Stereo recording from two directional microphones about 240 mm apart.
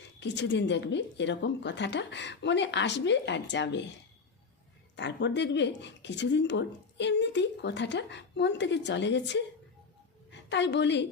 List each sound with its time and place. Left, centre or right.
0.2 s speech: left
4.9 s a woman's voice: left